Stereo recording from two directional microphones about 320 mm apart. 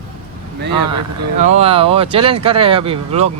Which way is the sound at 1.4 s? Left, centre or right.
Right.